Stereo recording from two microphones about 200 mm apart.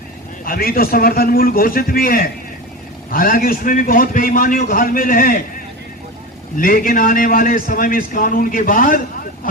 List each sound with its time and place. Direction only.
0.4 s a man's voice: 45° left (ahead or behind)
6.6 s a man's voice: 45° left (ahead or behind)